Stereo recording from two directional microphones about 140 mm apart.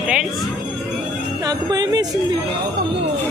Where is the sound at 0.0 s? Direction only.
5° right (ahead or behind).